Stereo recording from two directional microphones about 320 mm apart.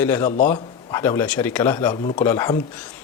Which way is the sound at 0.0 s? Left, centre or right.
Centre.